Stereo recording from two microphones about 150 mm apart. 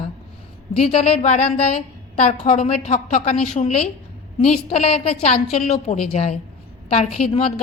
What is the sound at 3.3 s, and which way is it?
Speech, 5° left (ahead or behind).